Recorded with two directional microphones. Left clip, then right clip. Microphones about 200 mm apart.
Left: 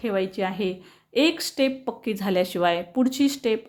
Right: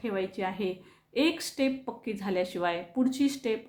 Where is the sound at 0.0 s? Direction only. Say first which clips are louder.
Left 6 dB; 35° left (ahead or behind).